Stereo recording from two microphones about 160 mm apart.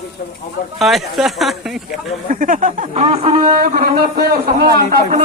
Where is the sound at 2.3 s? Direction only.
55° right (ahead or behind); by 3.4 s 35° right (ahead or behind).